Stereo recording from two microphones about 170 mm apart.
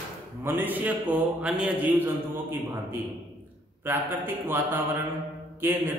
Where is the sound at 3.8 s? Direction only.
10° right (ahead or behind).